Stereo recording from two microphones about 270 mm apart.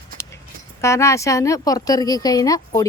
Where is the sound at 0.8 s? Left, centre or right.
Centre.